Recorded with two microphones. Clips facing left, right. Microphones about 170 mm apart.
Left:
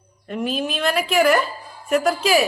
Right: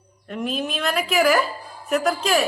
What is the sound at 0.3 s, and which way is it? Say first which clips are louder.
A woman's voice: left 2 dB; centre (ahead or behind).